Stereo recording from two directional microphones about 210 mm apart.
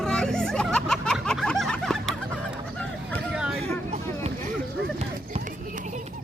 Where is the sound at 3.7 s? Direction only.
30° right (ahead or behind).